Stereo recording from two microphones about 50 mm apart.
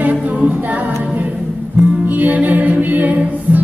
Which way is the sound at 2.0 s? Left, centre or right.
Right.